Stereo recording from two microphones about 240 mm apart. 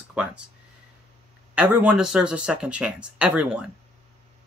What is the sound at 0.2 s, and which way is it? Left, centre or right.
Speech, centre.